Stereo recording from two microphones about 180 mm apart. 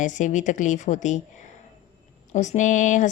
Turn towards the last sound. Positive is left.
turn(degrees=45)  # may be behind; listen again after turning